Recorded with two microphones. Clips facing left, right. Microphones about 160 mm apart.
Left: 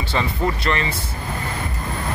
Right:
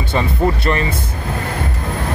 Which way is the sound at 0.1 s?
15° right (ahead or behind).